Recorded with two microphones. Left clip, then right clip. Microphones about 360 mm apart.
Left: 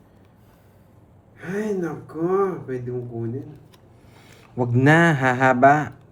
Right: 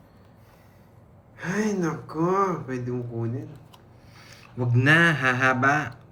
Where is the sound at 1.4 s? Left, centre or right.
Right.